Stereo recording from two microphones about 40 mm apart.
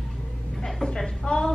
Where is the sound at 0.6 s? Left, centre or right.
Centre.